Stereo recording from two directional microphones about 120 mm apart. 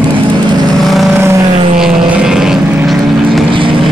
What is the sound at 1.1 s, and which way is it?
Vehicle, 20° right (ahead or behind).